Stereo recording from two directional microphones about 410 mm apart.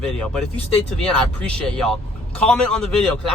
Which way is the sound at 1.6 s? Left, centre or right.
Centre.